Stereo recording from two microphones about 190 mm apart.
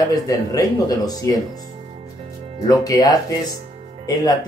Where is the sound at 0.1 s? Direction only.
20° left (ahead or behind).